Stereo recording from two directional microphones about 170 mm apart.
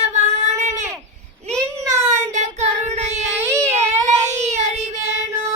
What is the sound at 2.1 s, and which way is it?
Child singing, 40° right (ahead or behind).